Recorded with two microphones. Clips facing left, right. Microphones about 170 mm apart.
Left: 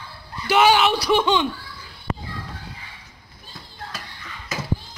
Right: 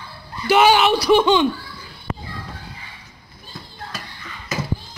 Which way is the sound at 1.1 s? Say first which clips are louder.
Right 6 dB; 45° right (ahead or behind).